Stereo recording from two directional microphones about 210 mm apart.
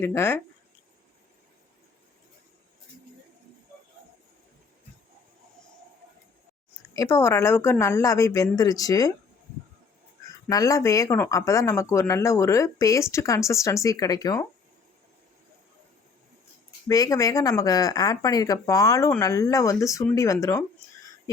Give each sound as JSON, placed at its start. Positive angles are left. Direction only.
{"t": 0.0, "sound": "speech", "side_deg": 10}
{"t": 6.9, "sound": "speech", "side_deg": 15}
{"t": 10.5, "sound": "speech", "side_deg": 15}
{"t": 16.9, "sound": "speech", "side_deg": 15}